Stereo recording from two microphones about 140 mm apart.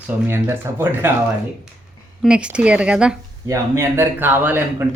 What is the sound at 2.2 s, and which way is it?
Speech, 5° right (ahead or behind).